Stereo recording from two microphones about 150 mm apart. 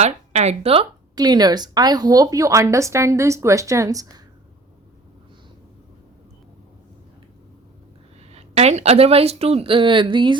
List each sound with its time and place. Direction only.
0.0 s speech: 45° right (ahead or behind)
1.1 s speech: 25° right (ahead or behind)
8.3 s speech: 45° right (ahead or behind)